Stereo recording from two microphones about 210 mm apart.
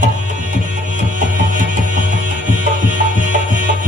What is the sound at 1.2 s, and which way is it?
Music, 40° right (ahead or behind).